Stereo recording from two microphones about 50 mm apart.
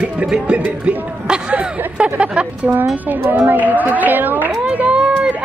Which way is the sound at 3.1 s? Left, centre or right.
Right.